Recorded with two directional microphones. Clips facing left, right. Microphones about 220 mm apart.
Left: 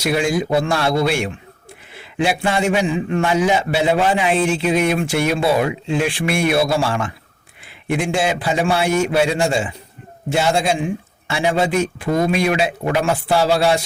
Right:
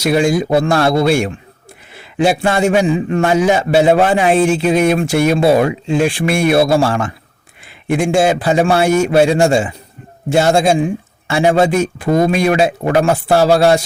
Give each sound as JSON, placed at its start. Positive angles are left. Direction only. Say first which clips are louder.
{"t": 0.0, "sound": "a man's voice", "louder": "right 5 dB", "side_deg": -40}